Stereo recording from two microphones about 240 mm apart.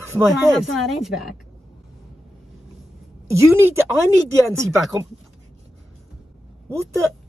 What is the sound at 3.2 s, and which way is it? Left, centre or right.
Speech, centre.